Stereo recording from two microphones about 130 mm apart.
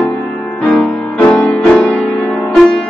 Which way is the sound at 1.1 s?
10° left (ahead or behind).